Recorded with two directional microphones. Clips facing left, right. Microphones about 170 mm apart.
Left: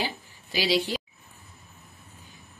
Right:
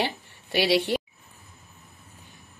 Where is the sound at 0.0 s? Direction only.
60° right (ahead or behind).